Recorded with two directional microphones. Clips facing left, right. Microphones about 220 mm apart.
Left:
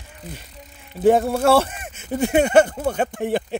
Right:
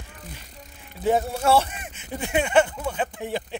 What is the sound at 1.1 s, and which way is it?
Speech, 55° left (ahead or behind).